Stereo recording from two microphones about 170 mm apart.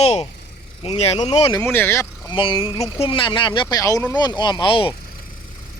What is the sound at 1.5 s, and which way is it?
Speech, 10° left (ahead or behind).